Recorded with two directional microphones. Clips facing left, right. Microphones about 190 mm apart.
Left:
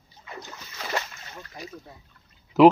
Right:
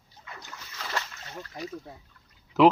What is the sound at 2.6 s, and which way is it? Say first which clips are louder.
Speech: left 4 dB; 10° left (ahead or behind).